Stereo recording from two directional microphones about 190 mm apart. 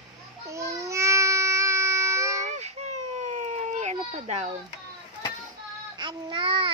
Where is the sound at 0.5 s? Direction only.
15° right (ahead or behind).